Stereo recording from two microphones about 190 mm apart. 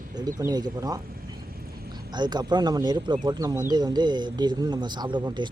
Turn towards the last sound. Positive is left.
turn(degrees=-25)  # may be behind; listen again after turning